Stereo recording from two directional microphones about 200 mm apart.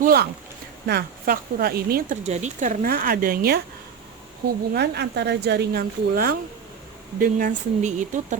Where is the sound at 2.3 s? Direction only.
35° right (ahead or behind); by 3.6 s 50° right (ahead or behind).